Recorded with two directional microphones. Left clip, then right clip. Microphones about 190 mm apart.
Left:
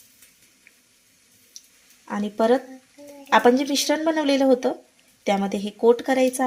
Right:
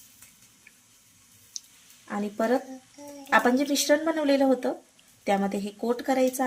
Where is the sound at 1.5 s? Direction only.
45° right (ahead or behind).